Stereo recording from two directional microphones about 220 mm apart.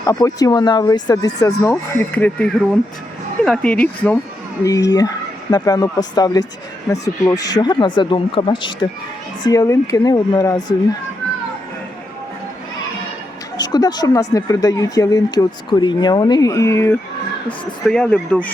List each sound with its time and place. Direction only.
0.0 s speech: 15° left (ahead or behind)
13.6 s speech: 20° left (ahead or behind)